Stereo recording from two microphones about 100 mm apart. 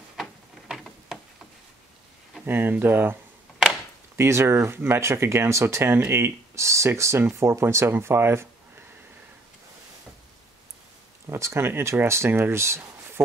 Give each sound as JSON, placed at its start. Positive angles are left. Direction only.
{"t": 0.2, "sound": "a sound", "side_deg": 0}
{"t": 2.4, "sound": "speech", "side_deg": -20}
{"t": 4.2, "sound": "speech", "side_deg": -25}
{"t": 11.2, "sound": "speech", "side_deg": -30}